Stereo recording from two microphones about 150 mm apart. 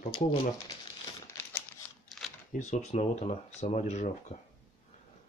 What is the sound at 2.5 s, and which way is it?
Speech, 50° left (ahead or behind).